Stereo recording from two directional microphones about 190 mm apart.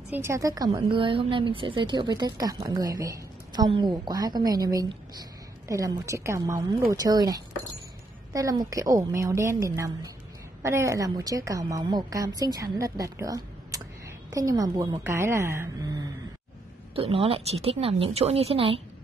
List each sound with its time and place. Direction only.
0.1 s a woman's voice: 15° right (ahead or behind)
16.9 s a woman's voice: 30° right (ahead or behind)